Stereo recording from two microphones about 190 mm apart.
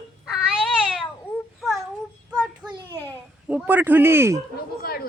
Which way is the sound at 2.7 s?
15° right (ahead or behind).